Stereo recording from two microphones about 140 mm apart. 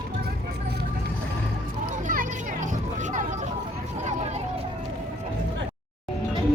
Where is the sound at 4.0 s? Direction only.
55° right (ahead or behind).